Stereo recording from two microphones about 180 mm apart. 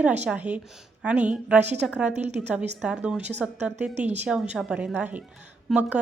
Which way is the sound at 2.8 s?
5° right (ahead or behind).